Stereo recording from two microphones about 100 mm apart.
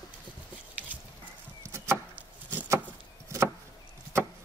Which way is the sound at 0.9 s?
15° right (ahead or behind).